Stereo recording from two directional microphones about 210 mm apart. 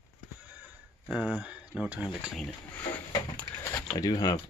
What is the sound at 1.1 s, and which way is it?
Speech, 5° right (ahead or behind).